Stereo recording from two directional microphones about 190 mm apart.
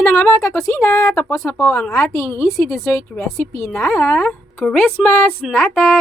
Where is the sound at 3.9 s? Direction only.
15° left (ahead or behind).